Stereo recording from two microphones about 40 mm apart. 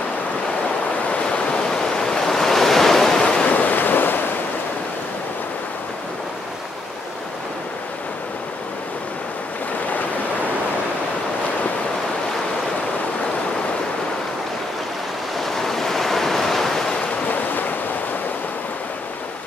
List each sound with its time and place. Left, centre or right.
1.2 s waves: left; by 3.2 s centre
3.2 s waves: left
3.4 s waves: left
15.4 s waves: centre